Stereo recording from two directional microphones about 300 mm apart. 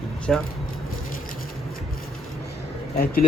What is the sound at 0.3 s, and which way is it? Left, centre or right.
Speech, centre.